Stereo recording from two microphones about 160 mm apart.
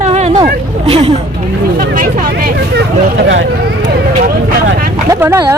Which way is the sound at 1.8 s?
60° right (ahead or behind).